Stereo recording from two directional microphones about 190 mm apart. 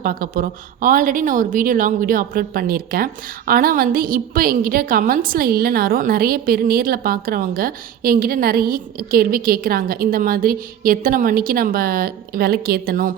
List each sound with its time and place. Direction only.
0.0 s speech: 50° right (ahead or behind)